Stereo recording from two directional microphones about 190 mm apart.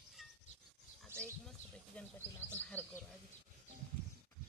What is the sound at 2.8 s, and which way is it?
Speech, 10° left (ahead or behind).